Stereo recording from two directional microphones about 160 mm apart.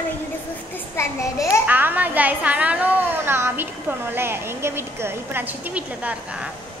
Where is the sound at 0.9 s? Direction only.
20° left (ahead or behind).